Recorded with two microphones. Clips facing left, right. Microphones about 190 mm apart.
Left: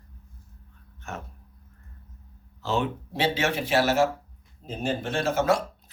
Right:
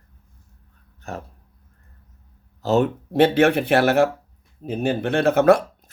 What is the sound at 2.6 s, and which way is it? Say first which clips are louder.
Speech: right 8 dB; 45° right (ahead or behind).